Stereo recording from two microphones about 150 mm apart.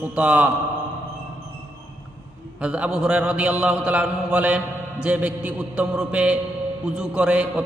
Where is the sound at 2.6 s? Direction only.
10° right (ahead or behind).